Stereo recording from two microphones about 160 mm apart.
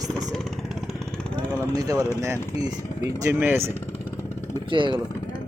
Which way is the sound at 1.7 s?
20° right (ahead or behind).